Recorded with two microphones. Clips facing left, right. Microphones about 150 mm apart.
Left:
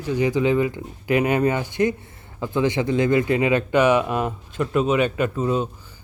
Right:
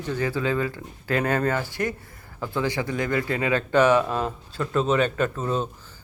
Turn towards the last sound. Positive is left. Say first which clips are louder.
# left 3 dB
turn(degrees=10)  # may be behind; listen again after turning